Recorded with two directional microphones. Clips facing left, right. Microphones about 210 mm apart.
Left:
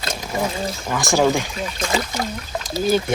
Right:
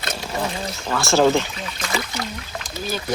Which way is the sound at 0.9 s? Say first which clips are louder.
Right 1 dB; 15° left (ahead or behind).